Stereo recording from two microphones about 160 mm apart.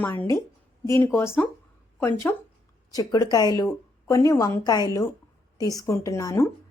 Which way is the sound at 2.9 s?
25° left (ahead or behind).